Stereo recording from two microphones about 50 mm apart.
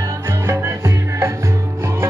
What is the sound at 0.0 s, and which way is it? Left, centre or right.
Music, right.